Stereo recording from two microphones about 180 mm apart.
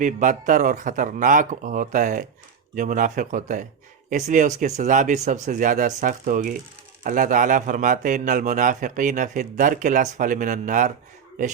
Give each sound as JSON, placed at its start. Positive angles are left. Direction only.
{"t": 0.0, "sound": "speech", "side_deg": -45}